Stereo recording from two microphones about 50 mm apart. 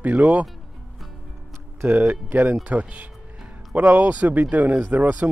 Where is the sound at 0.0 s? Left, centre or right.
Right.